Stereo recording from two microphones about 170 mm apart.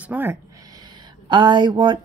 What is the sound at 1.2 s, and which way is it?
Speech, 25° right (ahead or behind).